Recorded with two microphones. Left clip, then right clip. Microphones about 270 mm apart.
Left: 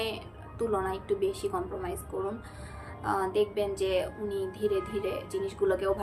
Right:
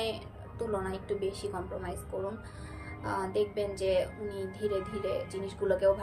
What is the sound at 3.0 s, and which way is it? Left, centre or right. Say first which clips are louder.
A woman's voice: left 4 dB; centre.